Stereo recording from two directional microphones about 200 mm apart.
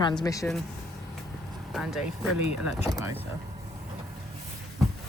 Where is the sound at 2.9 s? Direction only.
15° right (ahead or behind).